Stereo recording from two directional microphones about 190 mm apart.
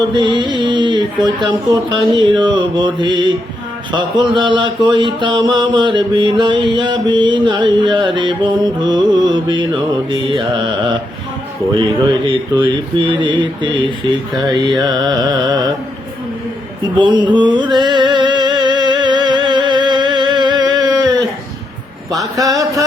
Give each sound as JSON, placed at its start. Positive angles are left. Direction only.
{"t": 0.1, "sound": "music", "side_deg": -25}
{"t": 1.5, "sound": "mantra", "side_deg": -25}
{"t": 12.2, "sound": "mantra", "side_deg": -25}
{"t": 17.0, "sound": "music", "side_deg": -25}
{"t": 22.1, "sound": "a sound", "side_deg": -20}